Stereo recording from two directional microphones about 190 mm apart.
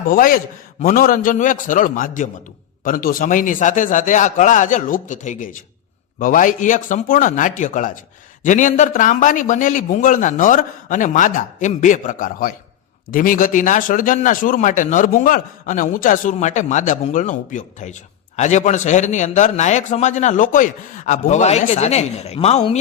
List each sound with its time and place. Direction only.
0.1 s a man's voice: 50° left (ahead or behind)